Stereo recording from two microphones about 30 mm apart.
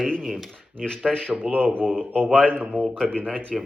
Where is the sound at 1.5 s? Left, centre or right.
Right.